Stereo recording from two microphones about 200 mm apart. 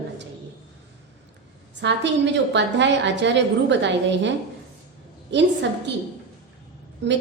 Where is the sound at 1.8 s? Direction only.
60° right (ahead or behind).